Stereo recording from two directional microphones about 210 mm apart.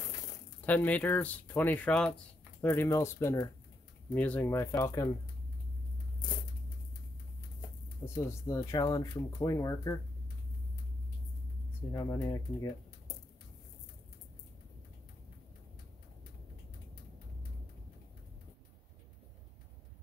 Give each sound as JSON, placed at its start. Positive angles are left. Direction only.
{"t": 0.7, "sound": "speech", "side_deg": 5}
{"t": 8.0, "sound": "speech", "side_deg": 15}
{"t": 11.9, "sound": "speech", "side_deg": 15}